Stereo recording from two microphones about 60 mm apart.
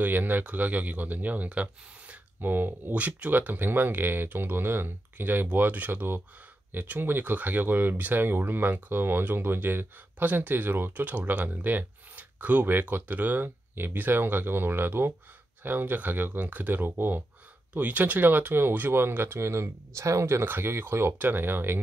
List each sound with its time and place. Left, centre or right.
0.0 s speech: right
2.4 s speech: right
19.4 s speech: right
20.4 s speech: right
21.2 s speech: right